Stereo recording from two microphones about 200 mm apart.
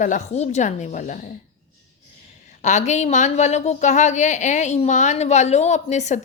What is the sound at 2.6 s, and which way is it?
Speech, 35° left (ahead or behind).